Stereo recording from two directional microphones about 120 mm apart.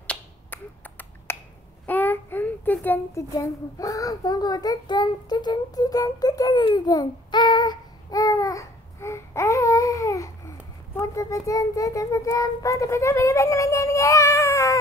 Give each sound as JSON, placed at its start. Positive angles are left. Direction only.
{"t": 0.0, "sound": "finger snapping", "side_deg": 10}
{"t": 1.9, "sound": "child singing", "side_deg": 15}
{"t": 3.3, "sound": "child singing", "side_deg": 30}
{"t": 11.0, "sound": "a child's voice", "side_deg": 25}